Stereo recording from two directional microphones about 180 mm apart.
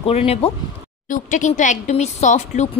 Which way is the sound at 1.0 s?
45° left (ahead or behind).